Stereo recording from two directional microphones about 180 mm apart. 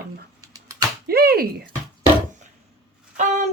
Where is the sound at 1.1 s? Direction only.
60° right (ahead or behind).